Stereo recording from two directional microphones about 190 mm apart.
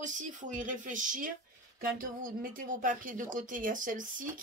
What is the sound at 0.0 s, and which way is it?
Speech, 40° right (ahead or behind).